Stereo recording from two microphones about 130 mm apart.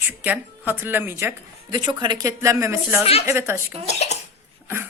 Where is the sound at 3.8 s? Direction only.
55° left (ahead or behind).